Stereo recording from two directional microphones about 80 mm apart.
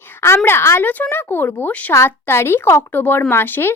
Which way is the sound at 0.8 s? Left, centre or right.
Left.